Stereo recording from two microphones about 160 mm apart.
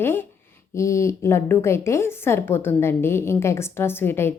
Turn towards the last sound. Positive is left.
turn(degrees=15)  # may be behind; listen again after turning